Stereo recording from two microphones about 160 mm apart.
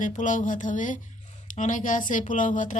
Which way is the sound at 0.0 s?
55° left (ahead or behind).